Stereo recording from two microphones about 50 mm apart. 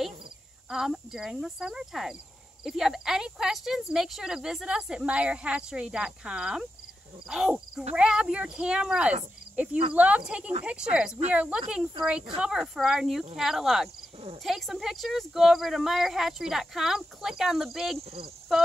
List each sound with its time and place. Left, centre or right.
0.7 s speech: centre
9.6 s speech: right; by 18.0 s centre